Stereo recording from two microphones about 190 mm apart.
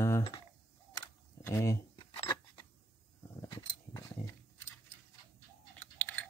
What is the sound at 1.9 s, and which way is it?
Keys jangling, 25° left (ahead or behind).